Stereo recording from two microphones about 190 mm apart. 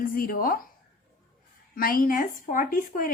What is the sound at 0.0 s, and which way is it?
Speech, 50° left (ahead or behind).